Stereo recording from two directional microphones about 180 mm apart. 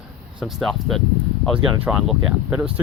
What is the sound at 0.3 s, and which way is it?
Speech, centre (ahead or behind).